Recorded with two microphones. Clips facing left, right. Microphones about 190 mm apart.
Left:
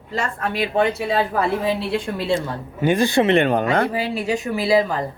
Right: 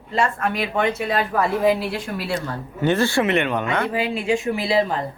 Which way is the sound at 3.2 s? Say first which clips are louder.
Left 4 dB; 35° left (ahead or behind).